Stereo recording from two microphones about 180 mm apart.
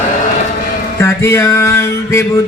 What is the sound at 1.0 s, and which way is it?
Music, 15° left (ahead or behind).